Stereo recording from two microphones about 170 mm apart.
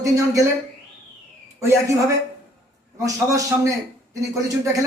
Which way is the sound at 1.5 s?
15° right (ahead or behind).